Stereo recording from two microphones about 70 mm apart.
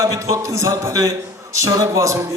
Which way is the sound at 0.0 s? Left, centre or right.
Right.